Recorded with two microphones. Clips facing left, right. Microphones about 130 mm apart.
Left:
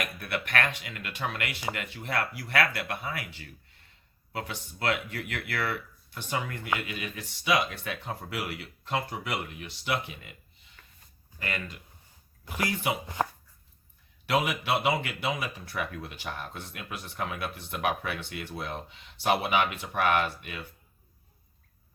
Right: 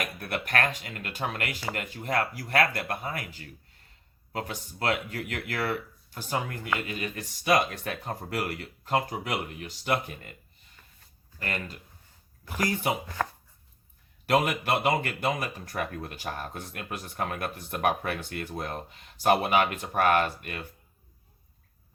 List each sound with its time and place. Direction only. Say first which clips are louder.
0.2 s speech: right 2 dB; 40° right (ahead or behind)
11.3 s speech: right 1 dB; 40° right (ahead or behind)
13.2 s dog: left 3 dB; 20° left (ahead or behind)
14.3 s speech: right 2 dB; 50° right (ahead or behind)